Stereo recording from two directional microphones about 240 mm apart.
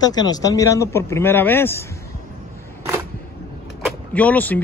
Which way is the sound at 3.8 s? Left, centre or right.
Centre.